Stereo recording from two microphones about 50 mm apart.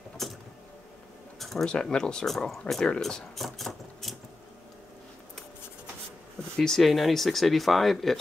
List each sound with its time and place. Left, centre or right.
0.2 s vehicle: centre
1.4 s a sound: centre
1.7 s speech: centre
2.3 s speech: centre
3.0 s speech: centre
3.3 s a sound: centre
6.5 s speech: centre
6.8 s speech: centre